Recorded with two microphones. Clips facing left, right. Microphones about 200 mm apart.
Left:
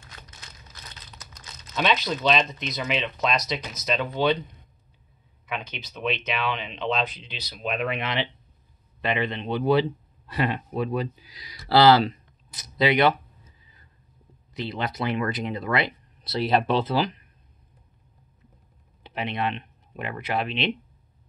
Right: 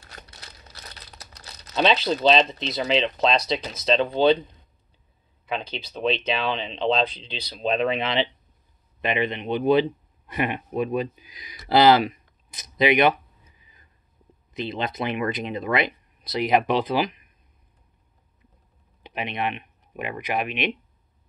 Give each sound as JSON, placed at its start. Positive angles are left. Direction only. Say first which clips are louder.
{"t": 0.0, "sound": "crumpling", "louder": "right 2 dB", "side_deg": -35}
{"t": 1.4, "sound": "speech", "louder": "right 5 dB", "side_deg": -35}
{"t": 19.0, "sound": "speech", "louder": "even", "side_deg": -20}